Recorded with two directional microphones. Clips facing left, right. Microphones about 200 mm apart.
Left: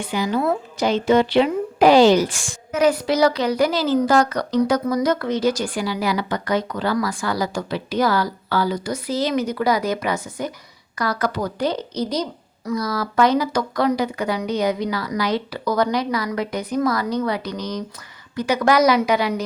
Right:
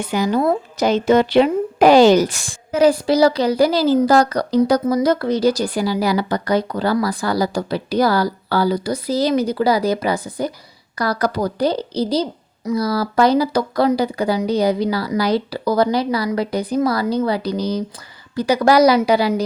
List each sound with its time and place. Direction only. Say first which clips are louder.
0.0 s speech: right 4 dB; 45° right (ahead or behind)